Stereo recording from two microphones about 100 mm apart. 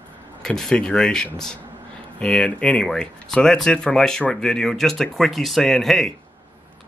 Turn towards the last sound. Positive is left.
turn(degrees=0)  # may be behind; listen again after turning